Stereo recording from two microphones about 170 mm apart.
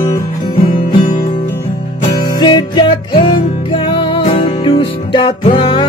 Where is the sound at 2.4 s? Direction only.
25° left (ahead or behind).